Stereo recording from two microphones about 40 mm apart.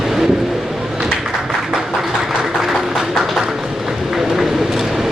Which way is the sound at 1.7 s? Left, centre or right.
Centre.